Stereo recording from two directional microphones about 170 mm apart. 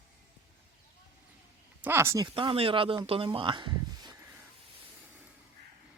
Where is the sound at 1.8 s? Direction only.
15° right (ahead or behind).